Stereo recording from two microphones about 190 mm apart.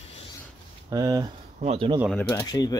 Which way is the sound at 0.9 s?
20° right (ahead or behind).